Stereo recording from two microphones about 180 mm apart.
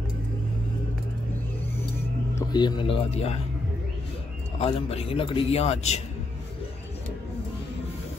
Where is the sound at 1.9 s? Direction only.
20° left (ahead or behind); by 3.4 s 35° left (ahead or behind).